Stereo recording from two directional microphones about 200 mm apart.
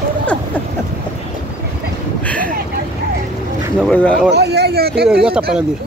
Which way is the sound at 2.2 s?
5° left (ahead or behind).